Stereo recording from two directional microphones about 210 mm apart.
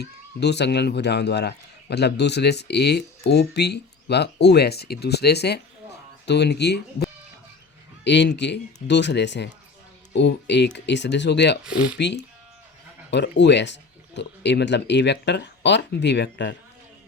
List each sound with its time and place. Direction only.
0.0 s speech: 55° left (ahead or behind)
11.6 s speech: 5° right (ahead or behind)
11.9 s speech: 55° left (ahead or behind)